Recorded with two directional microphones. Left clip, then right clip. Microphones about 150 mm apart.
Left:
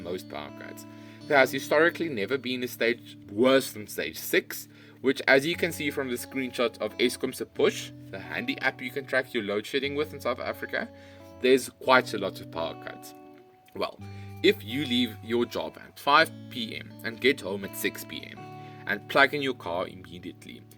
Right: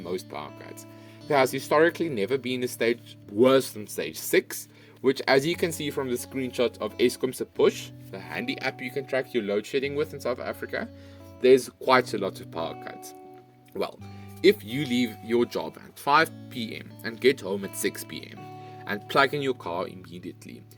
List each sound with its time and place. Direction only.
0.3 s speech: 45° right (ahead or behind)